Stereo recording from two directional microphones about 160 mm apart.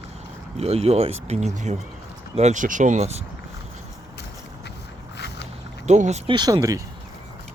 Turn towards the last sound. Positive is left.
turn(degrees=-20)  # may be behind; listen again after turning